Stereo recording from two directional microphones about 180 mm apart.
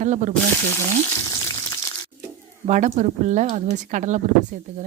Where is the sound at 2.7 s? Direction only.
40° right (ahead or behind).